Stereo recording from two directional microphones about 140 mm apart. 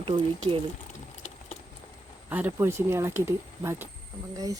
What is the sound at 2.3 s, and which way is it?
Speech, 15° right (ahead or behind).